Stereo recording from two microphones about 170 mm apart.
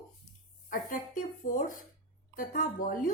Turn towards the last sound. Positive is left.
turn(degrees=55)  # may be behind; listen again after turning